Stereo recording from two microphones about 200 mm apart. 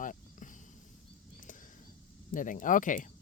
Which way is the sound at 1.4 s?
40° left (ahead or behind).